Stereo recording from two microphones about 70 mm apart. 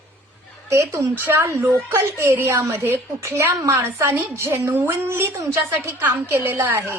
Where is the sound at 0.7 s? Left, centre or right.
Right.